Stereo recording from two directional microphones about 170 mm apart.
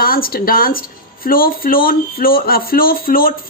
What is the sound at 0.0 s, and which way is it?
Speech, 60° left (ahead or behind).